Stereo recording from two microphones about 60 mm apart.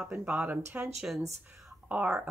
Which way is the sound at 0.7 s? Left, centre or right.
Right.